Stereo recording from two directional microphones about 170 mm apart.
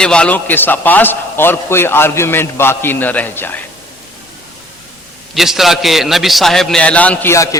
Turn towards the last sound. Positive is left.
turn(degrees=20)  # may be behind; listen again after turning